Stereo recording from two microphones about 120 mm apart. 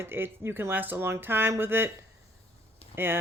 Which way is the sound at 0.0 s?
20° right (ahead or behind).